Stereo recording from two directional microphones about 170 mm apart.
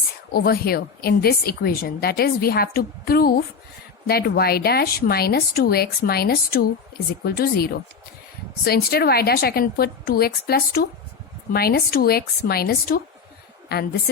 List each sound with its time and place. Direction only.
0.3 s a woman's voice: 65° left (ahead or behind)